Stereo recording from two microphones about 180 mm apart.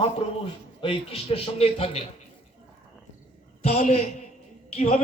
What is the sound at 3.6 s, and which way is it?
A man's voice, 35° left (ahead or behind).